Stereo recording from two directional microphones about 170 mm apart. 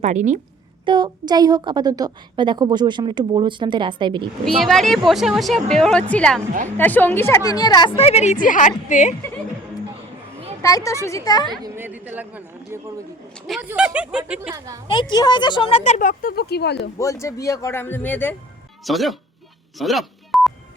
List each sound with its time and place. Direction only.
0.0 s a woman's voice: 45° right (ahead or behind)
0.9 s a woman's voice: 25° right (ahead or behind)
4.6 s a woman's voice: centre (ahead or behind); by 9.1 s 45° left (ahead or behind)
10.6 s a woman's voice: 20° left (ahead or behind)
11.6 s speech: 15° right (ahead or behind)
15.1 s a woman's voice: 25° left (ahead or behind)
15.8 s speech: 45° left (ahead or behind); by 16.9 s 80° left
17.0 s a man's voice: 20° left (ahead or behind)
18.9 s speech: centre (ahead or behind)
19.8 s a sound: centre (ahead or behind)